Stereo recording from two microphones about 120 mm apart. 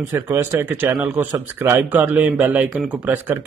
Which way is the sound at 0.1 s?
20° right (ahead or behind).